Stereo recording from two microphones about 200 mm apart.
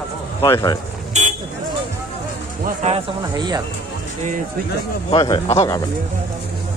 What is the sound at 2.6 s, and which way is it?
Speech, 35° right (ahead or behind).